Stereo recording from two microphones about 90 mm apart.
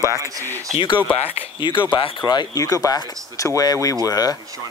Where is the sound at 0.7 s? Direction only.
65° left (ahead or behind).